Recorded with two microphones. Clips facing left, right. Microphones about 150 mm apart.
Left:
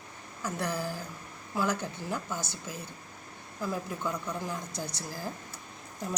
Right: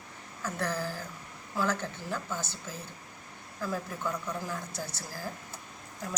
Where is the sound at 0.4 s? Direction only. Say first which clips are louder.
Even; 15° left (ahead or behind).